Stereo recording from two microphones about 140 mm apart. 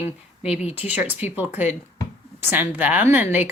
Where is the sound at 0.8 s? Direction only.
10° right (ahead or behind).